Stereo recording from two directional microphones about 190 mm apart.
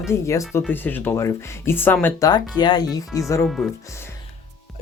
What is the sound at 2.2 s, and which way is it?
Speech, 20° left (ahead or behind).